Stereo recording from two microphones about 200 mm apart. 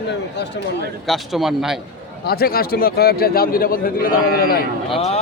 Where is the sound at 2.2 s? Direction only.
50° left (ahead or behind).